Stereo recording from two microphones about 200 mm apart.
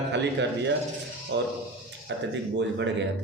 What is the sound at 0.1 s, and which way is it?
A man's voice, 60° right (ahead or behind).